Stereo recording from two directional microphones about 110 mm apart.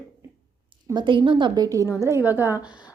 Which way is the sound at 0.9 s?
50° right (ahead or behind).